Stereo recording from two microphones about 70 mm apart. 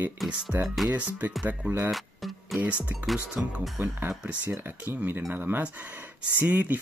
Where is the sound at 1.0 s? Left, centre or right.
Right.